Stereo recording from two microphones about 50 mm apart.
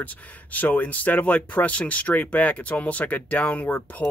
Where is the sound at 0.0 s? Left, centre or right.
Left.